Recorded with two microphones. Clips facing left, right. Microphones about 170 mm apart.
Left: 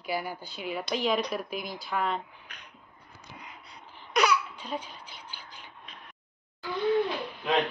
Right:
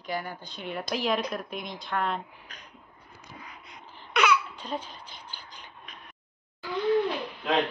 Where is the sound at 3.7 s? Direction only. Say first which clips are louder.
Right 2 dB; 35° left (ahead or behind).